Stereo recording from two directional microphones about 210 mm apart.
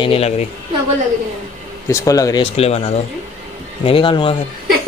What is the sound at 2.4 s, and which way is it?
Speech, 30° left (ahead or behind).